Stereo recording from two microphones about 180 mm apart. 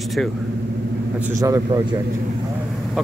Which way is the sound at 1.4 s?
20° right (ahead or behind).